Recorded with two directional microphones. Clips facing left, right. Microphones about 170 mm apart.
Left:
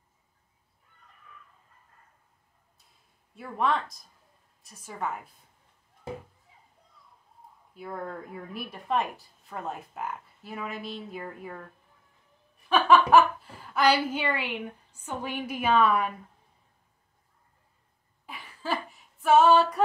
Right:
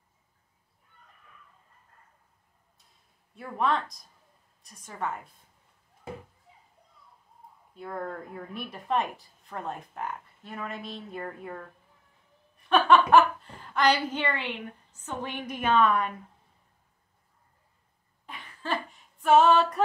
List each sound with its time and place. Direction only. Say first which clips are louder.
3.3 s speech: even; centre (ahead or behind)
7.7 s speech: right 1 dB; 5° left (ahead or behind)
12.6 s a woman's voice: even; centre (ahead or behind)
18.2 s a sound: left 2 dB; 5° left (ahead or behind)